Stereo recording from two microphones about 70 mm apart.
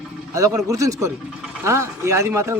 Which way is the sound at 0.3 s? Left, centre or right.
Right.